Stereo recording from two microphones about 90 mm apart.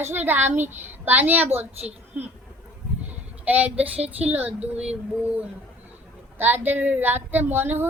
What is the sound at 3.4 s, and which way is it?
A child's voice, 20° right (ahead or behind).